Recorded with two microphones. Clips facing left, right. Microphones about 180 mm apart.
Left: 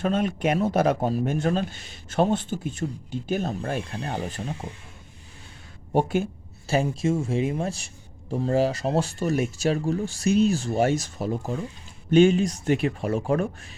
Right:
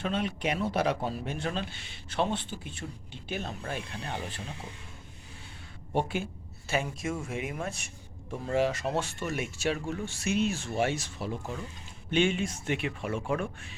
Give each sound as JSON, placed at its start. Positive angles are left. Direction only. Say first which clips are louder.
{"t": 0.0, "sound": "a man's voice", "louder": "left 7 dB", "side_deg": 45}
{"t": 5.9, "sound": "a man's voice", "louder": "left 7 dB", "side_deg": 45}
{"t": 6.7, "sound": "speech", "louder": "left 8 dB", "side_deg": 30}